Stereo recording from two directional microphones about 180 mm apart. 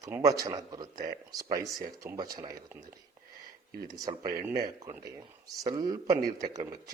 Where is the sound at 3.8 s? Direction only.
20° right (ahead or behind).